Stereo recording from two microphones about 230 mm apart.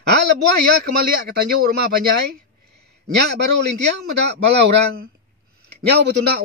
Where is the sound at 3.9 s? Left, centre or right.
Right.